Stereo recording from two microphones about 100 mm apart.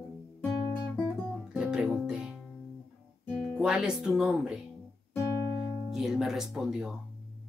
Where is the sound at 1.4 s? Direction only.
5° right (ahead or behind).